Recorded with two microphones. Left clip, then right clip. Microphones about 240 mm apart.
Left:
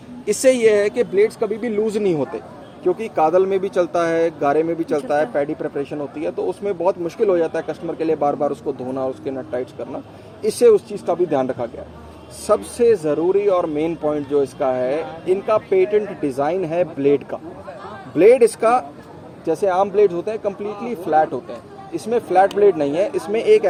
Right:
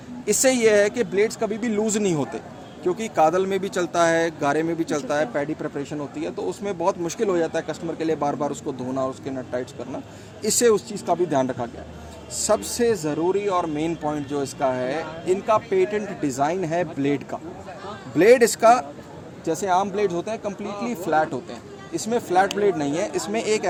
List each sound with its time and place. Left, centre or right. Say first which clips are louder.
0.3 s speech: left 4 dB; right
10.4 s speech: left 6 dB; right
12.5 s speech: left 5 dB; right
18.2 s speech: left 3 dB; right